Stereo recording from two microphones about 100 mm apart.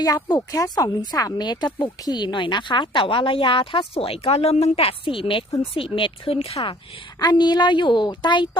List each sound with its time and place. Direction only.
0.0 s speech: 40° left (ahead or behind); by 6.7 s 70° left (ahead or behind)
7.2 s a woman's voice: 45° left (ahead or behind)